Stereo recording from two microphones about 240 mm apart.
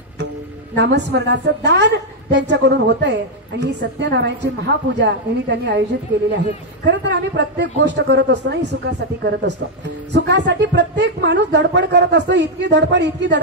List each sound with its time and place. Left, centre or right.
0.7 s speech: right
6.9 s speech: right